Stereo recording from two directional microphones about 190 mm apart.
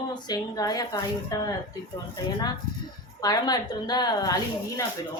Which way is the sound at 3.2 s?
20° left (ahead or behind).